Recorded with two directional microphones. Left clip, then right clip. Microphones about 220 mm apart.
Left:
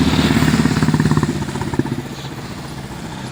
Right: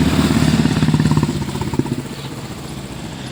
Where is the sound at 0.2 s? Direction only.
55° right (ahead or behind).